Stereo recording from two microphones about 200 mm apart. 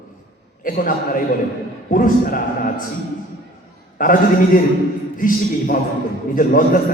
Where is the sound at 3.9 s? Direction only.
45° left (ahead or behind).